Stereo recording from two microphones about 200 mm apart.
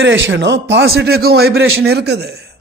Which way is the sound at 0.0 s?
70° right (ahead or behind).